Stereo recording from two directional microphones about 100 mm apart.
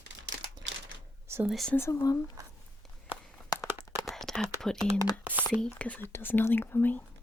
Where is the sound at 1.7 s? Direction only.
30° left (ahead or behind).